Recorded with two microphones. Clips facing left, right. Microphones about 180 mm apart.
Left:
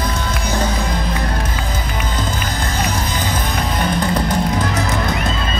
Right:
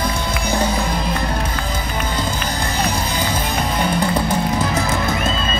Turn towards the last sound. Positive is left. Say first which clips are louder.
# even
turn(degrees=-10)  # may be behind; listen again after turning